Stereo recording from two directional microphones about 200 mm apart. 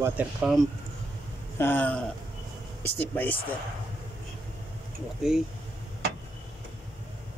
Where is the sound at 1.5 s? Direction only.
10° left (ahead or behind).